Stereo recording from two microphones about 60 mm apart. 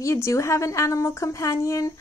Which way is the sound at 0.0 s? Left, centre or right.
Left.